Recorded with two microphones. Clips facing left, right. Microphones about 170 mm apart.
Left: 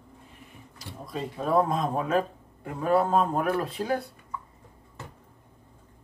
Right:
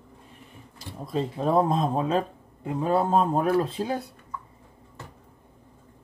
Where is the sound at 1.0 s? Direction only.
30° right (ahead or behind).